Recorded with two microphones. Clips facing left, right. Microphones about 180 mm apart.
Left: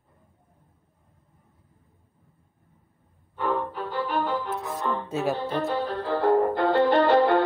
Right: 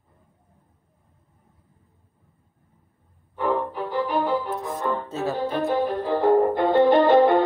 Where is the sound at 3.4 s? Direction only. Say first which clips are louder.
Right 3 dB; 10° right (ahead or behind).